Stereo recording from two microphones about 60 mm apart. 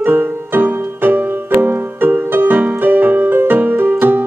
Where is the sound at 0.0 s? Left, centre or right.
Right.